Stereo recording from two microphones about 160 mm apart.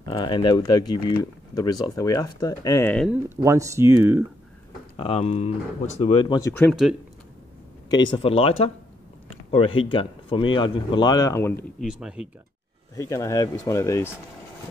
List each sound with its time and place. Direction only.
0.0 s speech: 30° left (ahead or behind)
3.3 s speech: 20° right (ahead or behind)
4.9 s speech: 40° left (ahead or behind)
6.4 s speech: 10° left (ahead or behind)
6.7 s speech: centre (ahead or behind)
7.9 s speech: 30° left (ahead or behind)
11.8 s speech: 5° right (ahead or behind)
12.9 s speech: 20° left (ahead or behind)